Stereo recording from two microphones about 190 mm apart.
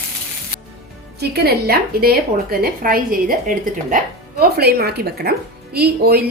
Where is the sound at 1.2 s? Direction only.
60° right (ahead or behind).